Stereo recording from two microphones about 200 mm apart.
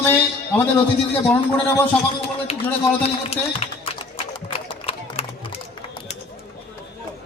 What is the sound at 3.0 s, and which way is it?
Speech, 30° left (ahead or behind).